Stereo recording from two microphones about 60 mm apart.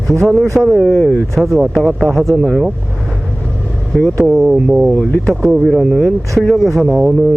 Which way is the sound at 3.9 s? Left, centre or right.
Centre.